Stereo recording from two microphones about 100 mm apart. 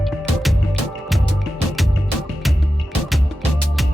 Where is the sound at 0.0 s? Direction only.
Centre (ahead or behind).